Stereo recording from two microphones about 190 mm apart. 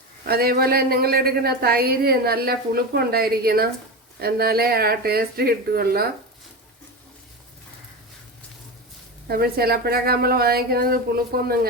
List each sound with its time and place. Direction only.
0.3 s a woman's voice: 55° right (ahead or behind)
9.2 s a woman's voice: 55° right (ahead or behind)